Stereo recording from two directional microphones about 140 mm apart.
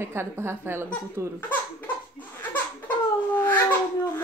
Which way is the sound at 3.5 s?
10° left (ahead or behind).